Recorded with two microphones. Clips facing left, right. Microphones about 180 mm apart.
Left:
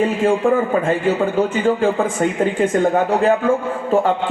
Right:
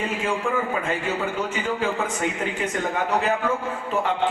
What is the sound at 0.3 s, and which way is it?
A man's voice, 50° left (ahead or behind).